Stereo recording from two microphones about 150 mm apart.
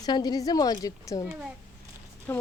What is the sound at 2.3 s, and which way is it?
Speech, 15° left (ahead or behind).